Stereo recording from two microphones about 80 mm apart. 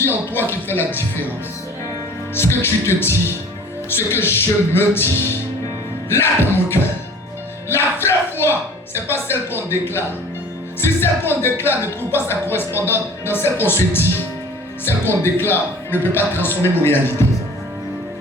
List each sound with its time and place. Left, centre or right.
0.0 s a man's voice: left
2.3 s speech: left
7.7 s a sound: left
9.0 s a man's voice: left
15.0 s a man's voice: left